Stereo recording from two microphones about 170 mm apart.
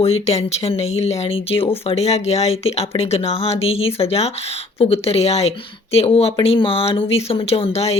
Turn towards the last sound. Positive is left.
turn(degrees=35)  # may be behind; listen again after turning